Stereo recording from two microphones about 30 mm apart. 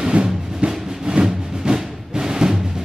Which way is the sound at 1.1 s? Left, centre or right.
Right.